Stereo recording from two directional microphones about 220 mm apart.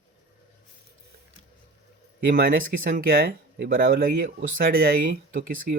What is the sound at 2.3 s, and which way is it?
Speech, 40° right (ahead or behind).